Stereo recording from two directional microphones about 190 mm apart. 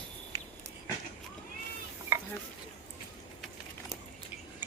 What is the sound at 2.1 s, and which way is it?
Stir, 10° right (ahead or behind).